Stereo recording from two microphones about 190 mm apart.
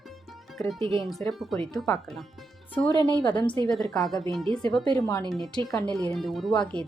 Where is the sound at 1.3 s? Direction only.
Centre (ahead or behind).